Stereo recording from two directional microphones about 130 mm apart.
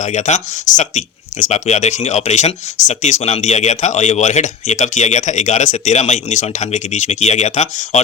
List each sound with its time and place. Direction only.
0.0 s speech: 70° left (ahead or behind)